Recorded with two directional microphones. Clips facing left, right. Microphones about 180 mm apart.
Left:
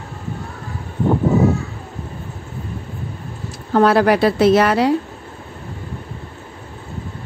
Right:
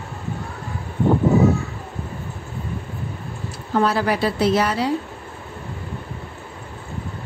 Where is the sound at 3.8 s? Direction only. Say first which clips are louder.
Left 10 dB; 70° left (ahead or behind).